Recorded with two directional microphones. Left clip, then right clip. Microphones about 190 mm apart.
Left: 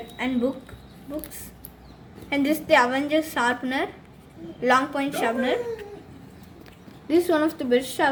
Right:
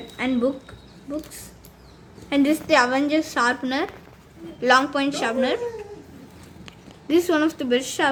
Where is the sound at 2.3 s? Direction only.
30° right (ahead or behind).